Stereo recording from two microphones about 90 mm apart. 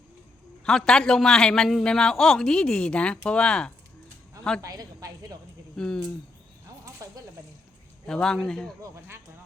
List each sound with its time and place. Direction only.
0.6 s a man's voice: 5° left (ahead or behind)
4.6 s a woman's voice: 40° right (ahead or behind)
5.7 s speech: 10° left (ahead or behind)
8.0 s a man's voice: 5° left (ahead or behind)
8.8 s speech: 25° right (ahead or behind)